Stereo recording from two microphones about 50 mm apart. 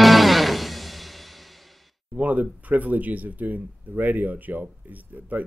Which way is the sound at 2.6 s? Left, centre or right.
Right.